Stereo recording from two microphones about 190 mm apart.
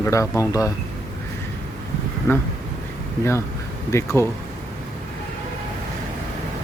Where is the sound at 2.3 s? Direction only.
15° left (ahead or behind).